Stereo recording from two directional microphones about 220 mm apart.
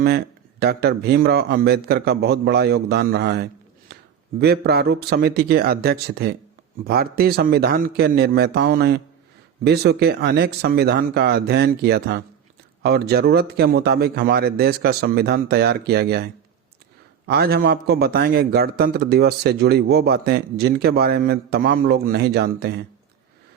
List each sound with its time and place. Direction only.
0.6 s a man's voice: 45° right (ahead or behind)